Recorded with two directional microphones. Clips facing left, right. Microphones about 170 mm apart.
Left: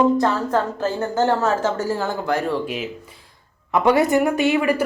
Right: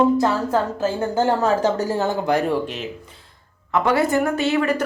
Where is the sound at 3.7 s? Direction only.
15° left (ahead or behind).